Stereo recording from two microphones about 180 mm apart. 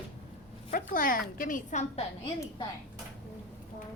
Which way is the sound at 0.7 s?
50° left (ahead or behind).